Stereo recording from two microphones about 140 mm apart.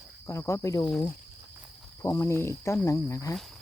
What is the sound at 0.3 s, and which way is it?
Speech, 20° left (ahead or behind).